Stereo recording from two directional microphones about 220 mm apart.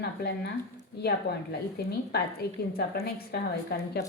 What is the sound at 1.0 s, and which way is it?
Speech, 45° left (ahead or behind).